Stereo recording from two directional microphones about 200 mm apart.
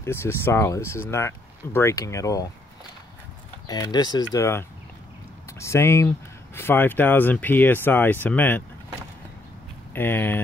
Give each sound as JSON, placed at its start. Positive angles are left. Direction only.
{"t": 0.0, "sound": "speech", "side_deg": 10}
{"t": 3.6, "sound": "speech", "side_deg": 20}
{"t": 9.9, "sound": "speech", "side_deg": 10}